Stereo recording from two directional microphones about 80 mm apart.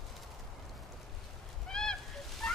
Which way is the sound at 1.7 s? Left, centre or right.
Centre.